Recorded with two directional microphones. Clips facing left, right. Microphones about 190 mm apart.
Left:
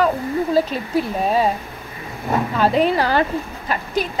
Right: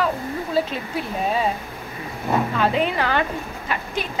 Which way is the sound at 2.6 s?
35° left (ahead or behind).